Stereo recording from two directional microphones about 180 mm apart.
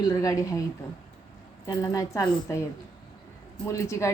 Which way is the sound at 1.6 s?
15° left (ahead or behind).